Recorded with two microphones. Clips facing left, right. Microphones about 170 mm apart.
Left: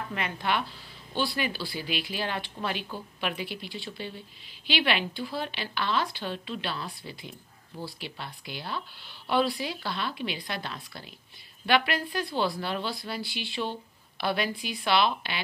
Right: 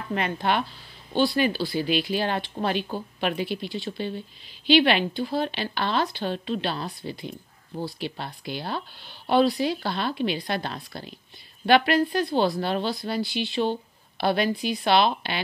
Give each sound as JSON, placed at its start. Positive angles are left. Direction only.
{"t": 0.1, "sound": "a woman's voice", "side_deg": -35}
{"t": 13.6, "sound": "a woman's voice", "side_deg": -40}